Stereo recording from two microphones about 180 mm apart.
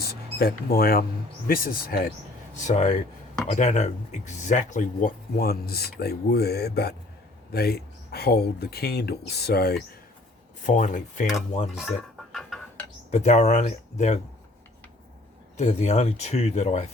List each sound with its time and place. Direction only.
0.0 s speech: 60° left (ahead or behind)
2.6 s speech: 40° left (ahead or behind); by 9.7 s 60° left (ahead or behind)
10.6 s speech: 45° left (ahead or behind)
11.9 s a sound: centre (ahead or behind)
13.1 s speech: 40° left (ahead or behind)
15.5 s speech: 40° left (ahead or behind)